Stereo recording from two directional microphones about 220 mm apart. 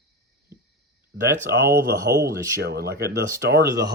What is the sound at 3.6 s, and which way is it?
Speech, 15° right (ahead or behind).